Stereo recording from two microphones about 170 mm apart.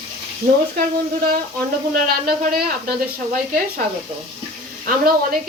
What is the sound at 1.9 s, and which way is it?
Speech, 60° right (ahead or behind).